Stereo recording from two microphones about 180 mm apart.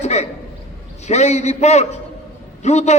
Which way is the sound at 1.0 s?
40° left (ahead or behind).